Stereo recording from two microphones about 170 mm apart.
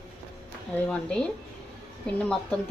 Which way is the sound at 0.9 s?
5° left (ahead or behind).